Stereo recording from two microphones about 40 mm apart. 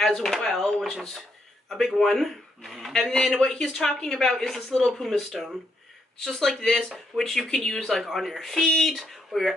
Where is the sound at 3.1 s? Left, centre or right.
Centre.